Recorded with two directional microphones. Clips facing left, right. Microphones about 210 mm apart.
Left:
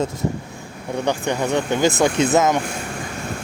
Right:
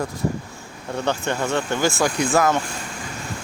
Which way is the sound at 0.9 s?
15° left (ahead or behind).